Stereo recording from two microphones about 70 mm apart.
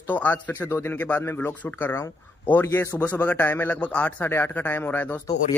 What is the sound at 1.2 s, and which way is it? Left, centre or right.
Speech, left.